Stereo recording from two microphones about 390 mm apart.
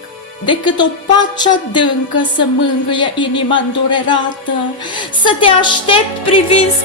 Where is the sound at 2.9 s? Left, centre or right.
Centre.